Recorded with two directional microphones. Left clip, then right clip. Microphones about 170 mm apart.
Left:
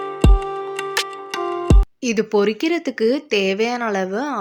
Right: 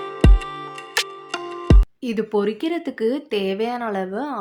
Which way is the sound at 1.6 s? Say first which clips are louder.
Left 2 dB; 15° left (ahead or behind).